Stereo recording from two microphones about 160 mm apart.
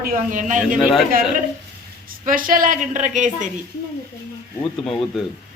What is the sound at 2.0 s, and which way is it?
A woman's voice, 60° right (ahead or behind).